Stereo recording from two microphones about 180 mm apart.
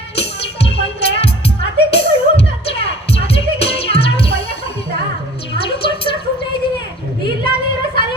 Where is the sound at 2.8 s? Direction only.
35° left (ahead or behind).